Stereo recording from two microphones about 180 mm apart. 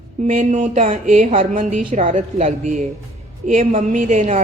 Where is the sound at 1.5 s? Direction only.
45° right (ahead or behind).